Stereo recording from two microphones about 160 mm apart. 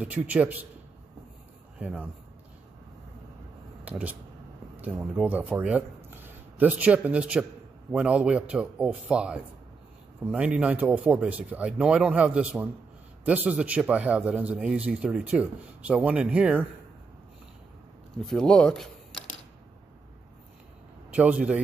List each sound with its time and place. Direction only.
0.0 s speech: 10° right (ahead or behind)
1.8 s a man's voice: 5° right (ahead or behind)
3.8 s speech: 10° right (ahead or behind)
6.0 s a sound: 10° right (ahead or behind)
7.9 s speech: 5° right (ahead or behind)
18.2 s speech: 5° left (ahead or behind)
21.1 s speech: 10° right (ahead or behind)